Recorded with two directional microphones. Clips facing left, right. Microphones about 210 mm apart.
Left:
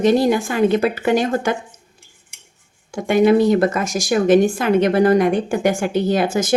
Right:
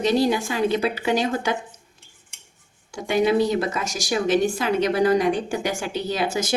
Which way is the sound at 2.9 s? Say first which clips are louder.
Left 6 dB; 50° left (ahead or behind).